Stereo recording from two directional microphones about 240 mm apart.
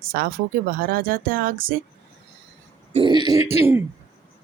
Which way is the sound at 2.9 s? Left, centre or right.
Centre.